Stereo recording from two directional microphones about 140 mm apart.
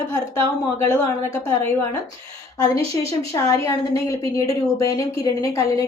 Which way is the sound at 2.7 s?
20° left (ahead or behind).